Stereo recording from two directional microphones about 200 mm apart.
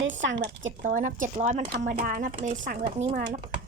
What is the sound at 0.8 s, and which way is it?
A woman's voice, 40° right (ahead or behind).